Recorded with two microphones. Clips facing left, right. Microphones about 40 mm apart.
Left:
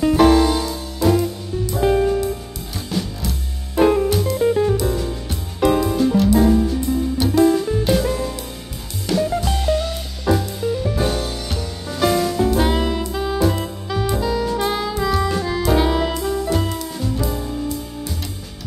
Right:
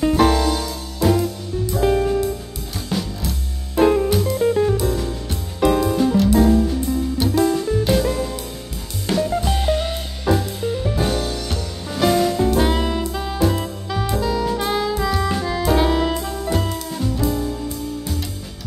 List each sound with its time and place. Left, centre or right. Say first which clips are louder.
0.1 s music: left 3 dB; centre
1.0 s music: left 1 dB; centre
9.6 s music: even; centre
11.0 s music: even; centre
12.4 s saxophone: even; centre